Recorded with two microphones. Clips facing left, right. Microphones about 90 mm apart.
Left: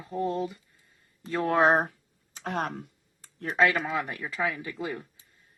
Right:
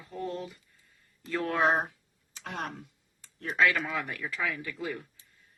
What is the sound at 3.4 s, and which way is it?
Speech, 25° left (ahead or behind).